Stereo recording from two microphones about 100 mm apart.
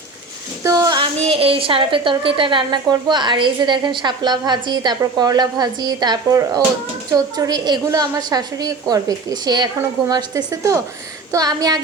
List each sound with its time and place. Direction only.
0.6 s child singing: 35° right (ahead or behind)
1.2 s a woman's voice: 70° right (ahead or behind); by 11.8 s 40° right (ahead or behind)